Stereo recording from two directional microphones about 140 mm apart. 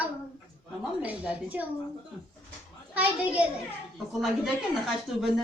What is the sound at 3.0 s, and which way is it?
A man's voice, 10° right (ahead or behind).